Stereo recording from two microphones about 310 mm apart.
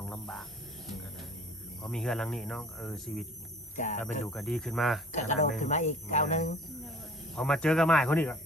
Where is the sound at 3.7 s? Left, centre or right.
Left.